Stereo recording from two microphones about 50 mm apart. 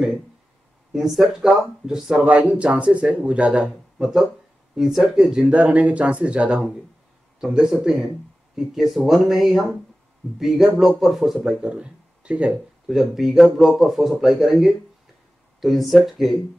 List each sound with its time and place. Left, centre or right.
0.9 s speech: centre
2.2 s a man's voice: right
4.0 s speech: centre
5.4 s a man's voice: right
8.5 s speech: centre
11.7 s speech: right
12.8 s speech: centre